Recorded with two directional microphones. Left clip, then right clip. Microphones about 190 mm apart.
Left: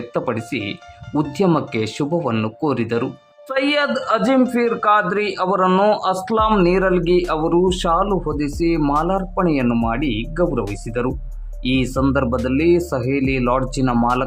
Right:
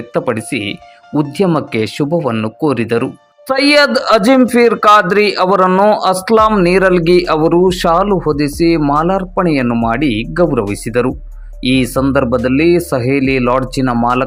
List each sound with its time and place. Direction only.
0.1 s speech: 15° right (ahead or behind)
3.5 s speech: 30° right (ahead or behind)
5.6 s speech: 10° right (ahead or behind)
6.0 s speech: 25° right (ahead or behind)
9.9 s speech: 20° right (ahead or behind)